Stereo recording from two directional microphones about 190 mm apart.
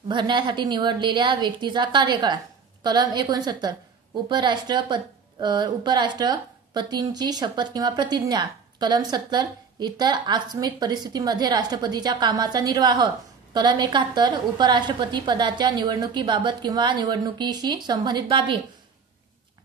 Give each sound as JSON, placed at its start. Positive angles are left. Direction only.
{"t": 0.1, "sound": "a woman's voice", "side_deg": -25}